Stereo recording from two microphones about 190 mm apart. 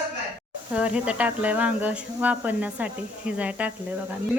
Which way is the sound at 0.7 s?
5° right (ahead or behind).